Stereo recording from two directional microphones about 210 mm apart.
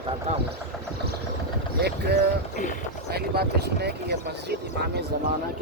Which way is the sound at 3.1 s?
50° right (ahead or behind).